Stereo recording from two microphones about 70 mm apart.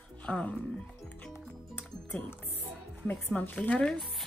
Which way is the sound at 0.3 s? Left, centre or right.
Centre.